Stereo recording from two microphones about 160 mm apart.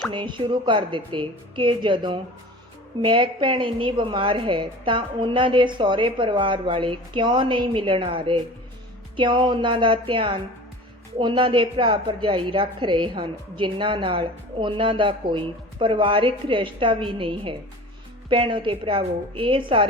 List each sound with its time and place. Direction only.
0.1 s a woman's voice: 30° right (ahead or behind)